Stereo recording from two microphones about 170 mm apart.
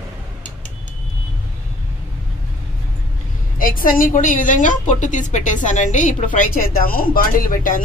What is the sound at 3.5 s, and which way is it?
A woman's voice, 55° left (ahead or behind).